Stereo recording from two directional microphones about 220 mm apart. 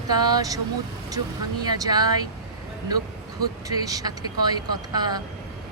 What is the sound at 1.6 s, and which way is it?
Speech, 20° right (ahead or behind).